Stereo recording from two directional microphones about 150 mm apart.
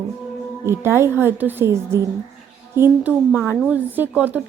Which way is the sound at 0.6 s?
15° right (ahead or behind).